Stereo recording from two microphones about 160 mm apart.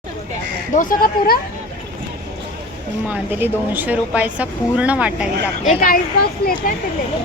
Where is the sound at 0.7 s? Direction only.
60° left (ahead or behind).